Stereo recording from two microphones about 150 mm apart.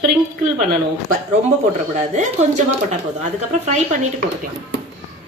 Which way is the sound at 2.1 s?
50° right (ahead or behind).